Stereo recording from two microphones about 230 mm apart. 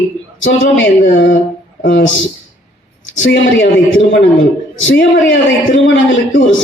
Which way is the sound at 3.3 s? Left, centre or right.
Left.